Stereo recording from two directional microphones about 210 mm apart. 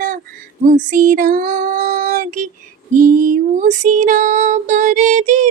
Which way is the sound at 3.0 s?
40° right (ahead or behind).